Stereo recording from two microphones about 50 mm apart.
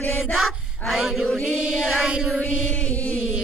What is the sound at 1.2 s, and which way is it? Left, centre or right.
A capella, left.